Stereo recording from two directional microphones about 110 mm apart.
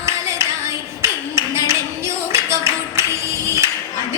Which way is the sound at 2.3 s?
25° right (ahead or behind).